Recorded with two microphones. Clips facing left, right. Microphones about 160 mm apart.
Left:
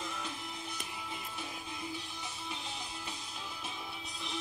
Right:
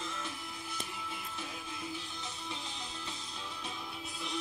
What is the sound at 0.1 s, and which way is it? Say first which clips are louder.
Music: left 1 dB; 15° left (ahead or behind).